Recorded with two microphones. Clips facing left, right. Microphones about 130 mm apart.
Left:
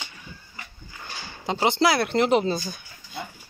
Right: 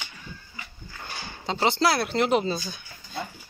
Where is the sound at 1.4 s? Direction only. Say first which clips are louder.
Left 2 dB; 15° left (ahead or behind).